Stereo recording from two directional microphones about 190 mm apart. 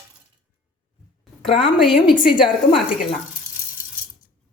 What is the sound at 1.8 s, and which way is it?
Speech, centre (ahead or behind).